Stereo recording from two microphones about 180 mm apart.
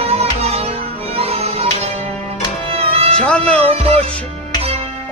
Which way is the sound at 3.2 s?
5° left (ahead or behind).